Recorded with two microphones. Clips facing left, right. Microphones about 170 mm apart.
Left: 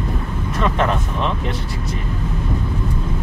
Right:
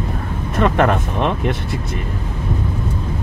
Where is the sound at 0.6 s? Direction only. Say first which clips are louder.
Right 4 dB; 55° right (ahead or behind).